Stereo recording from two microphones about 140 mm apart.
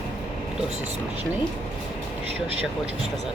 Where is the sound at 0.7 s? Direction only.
50° right (ahead or behind).